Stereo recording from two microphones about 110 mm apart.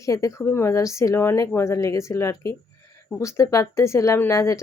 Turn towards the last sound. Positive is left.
turn(degrees=25)  # may be behind; listen again after turning